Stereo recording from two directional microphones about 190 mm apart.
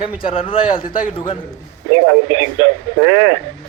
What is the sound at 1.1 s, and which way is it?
Speech, 25° left (ahead or behind).